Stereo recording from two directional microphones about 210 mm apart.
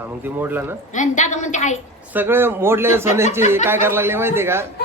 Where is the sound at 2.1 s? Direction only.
10° right (ahead or behind).